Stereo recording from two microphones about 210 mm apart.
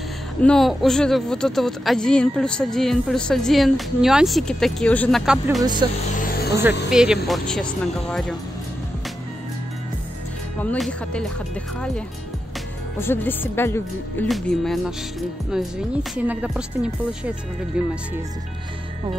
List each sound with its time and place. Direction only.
0.4 s speech: centre (ahead or behind)
5.6 s speech: 20° right (ahead or behind)
6.1 s vehicle: 45° left (ahead or behind)
6.9 s speech: 5° right (ahead or behind)
10.6 s speech: 5° left (ahead or behind)
13.0 s speech: 10° left (ahead or behind)